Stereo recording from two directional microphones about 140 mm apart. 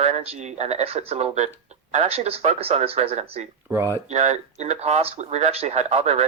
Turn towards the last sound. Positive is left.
turn(degrees=-50)  # may be behind; listen again after turning